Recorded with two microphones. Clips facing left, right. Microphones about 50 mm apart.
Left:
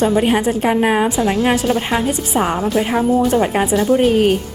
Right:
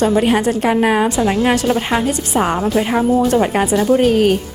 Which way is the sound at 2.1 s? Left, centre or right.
Centre.